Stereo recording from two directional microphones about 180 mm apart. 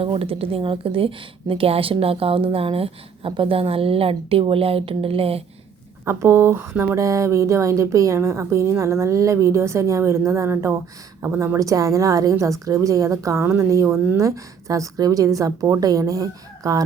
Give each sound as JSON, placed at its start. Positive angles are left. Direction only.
{"t": 0.0, "sound": "a woman's voice", "side_deg": -30}
{"t": 6.1, "sound": "a woman's voice", "side_deg": -15}